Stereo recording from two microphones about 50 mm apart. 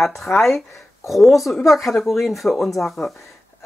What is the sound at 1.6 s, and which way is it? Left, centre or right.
Speech, centre.